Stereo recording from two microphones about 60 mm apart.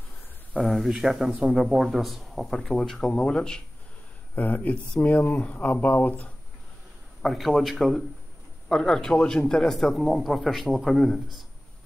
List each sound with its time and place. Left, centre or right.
0.6 s a man's voice: centre
3.1 s speech: centre
4.4 s speech: left
7.2 s a man's voice: centre